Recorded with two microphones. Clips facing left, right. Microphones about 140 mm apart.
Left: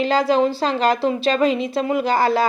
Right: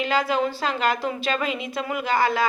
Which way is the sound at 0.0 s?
35° left (ahead or behind).